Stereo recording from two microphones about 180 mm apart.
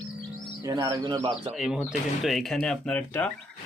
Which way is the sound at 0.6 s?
20° right (ahead or behind).